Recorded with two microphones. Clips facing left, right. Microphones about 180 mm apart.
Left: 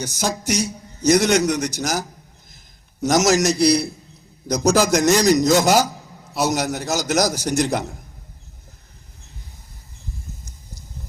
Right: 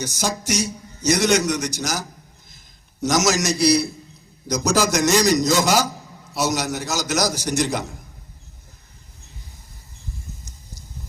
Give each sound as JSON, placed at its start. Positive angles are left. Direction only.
{"t": 0.0, "sound": "a man's voice", "side_deg": 60}
{"t": 3.1, "sound": "a man's voice", "side_deg": 55}